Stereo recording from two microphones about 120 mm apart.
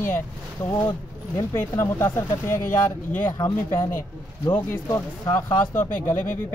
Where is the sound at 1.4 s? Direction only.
25° left (ahead or behind).